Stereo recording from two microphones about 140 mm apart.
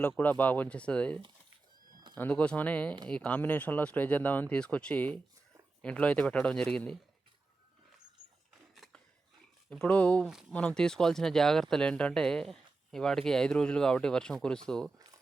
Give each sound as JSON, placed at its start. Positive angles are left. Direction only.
{"t": 0.2, "sound": "speech", "side_deg": 10}
{"t": 8.7, "sound": "scissors", "side_deg": 0}
{"t": 9.6, "sound": "speech", "side_deg": 10}
{"t": 14.9, "sound": "a sound", "side_deg": -25}